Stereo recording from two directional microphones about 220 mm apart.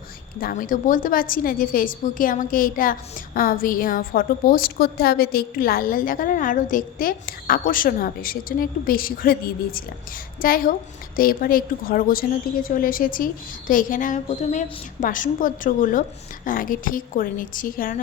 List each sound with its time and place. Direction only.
0.3 s a woman's voice: 40° left (ahead or behind)